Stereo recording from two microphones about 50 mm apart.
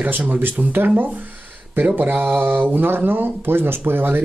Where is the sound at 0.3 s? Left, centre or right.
Right.